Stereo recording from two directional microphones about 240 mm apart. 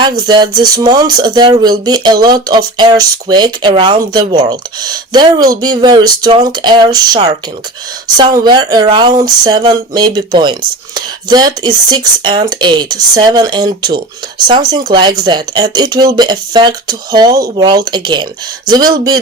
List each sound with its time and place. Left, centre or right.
0.0 s speech: centre